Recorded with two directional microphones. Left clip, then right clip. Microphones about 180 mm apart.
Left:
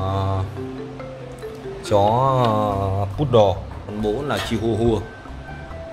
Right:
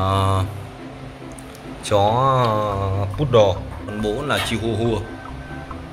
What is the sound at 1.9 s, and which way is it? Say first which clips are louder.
Mantra: even; 10° left (ahead or behind).